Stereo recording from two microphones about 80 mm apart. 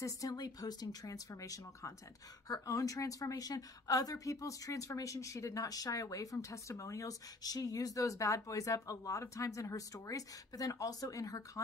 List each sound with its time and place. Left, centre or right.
0.0 s a woman's voice: left